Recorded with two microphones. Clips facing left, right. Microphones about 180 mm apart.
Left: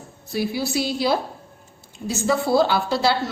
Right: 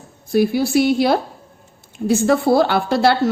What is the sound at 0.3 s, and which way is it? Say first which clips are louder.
A woman's voice: right 8 dB; 50° right (ahead or behind).